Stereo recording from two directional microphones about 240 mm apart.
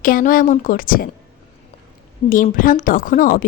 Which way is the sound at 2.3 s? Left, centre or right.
Left.